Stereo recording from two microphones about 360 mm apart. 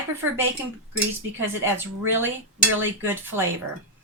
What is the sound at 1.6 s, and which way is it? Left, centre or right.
Speech, centre.